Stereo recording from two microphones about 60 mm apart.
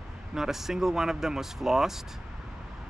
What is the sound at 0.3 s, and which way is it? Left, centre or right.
Speech, centre.